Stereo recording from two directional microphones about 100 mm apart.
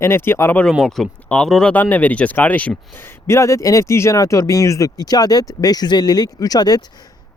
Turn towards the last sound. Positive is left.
turn(degrees=40)  # may be behind; listen again after turning